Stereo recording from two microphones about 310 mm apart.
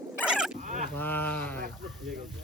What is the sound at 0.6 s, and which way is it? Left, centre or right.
Dog, right.